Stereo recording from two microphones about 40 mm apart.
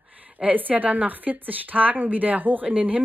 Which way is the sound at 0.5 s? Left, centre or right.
Right.